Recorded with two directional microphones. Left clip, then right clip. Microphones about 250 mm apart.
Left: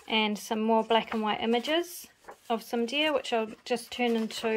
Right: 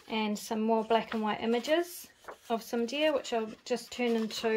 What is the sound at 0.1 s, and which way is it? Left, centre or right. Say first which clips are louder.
Speech: left 5 dB; centre.